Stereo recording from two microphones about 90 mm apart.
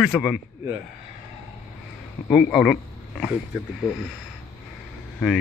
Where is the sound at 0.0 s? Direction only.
5° right (ahead or behind).